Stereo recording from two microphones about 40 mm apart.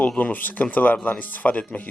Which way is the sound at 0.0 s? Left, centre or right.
Left.